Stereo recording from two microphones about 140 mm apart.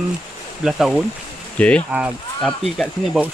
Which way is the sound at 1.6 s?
10° left (ahead or behind).